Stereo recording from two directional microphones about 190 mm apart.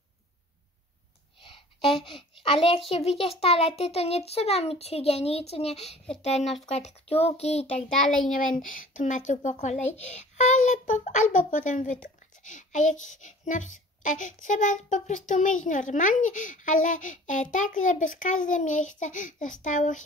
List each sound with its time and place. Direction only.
1.4 s a sound: 25° left (ahead or behind)
2.9 s speech: 30° left (ahead or behind)
8.3 s speech: 45° left (ahead or behind)